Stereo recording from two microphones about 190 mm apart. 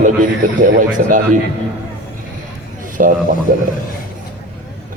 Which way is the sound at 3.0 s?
45° right (ahead or behind).